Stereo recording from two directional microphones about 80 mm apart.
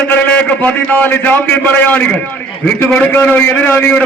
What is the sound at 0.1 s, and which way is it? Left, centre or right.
A man's voice, left.